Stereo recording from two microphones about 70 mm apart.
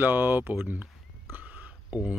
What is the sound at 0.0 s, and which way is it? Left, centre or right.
Speech, right.